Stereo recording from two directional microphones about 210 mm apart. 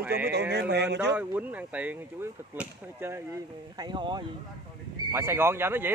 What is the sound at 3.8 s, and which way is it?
Speech, 20° right (ahead or behind).